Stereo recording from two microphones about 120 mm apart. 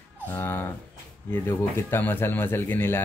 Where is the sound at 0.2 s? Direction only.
20° left (ahead or behind).